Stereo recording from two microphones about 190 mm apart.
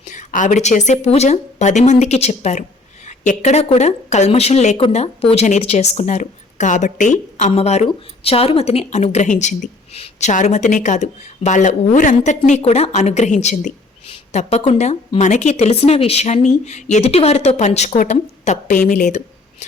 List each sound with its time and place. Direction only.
0.0 s speech: 40° left (ahead or behind)